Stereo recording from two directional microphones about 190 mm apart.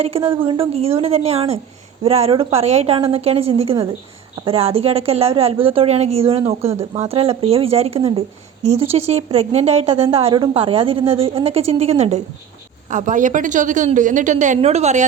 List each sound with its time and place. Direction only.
0.0 s a woman's voice: 30° right (ahead or behind)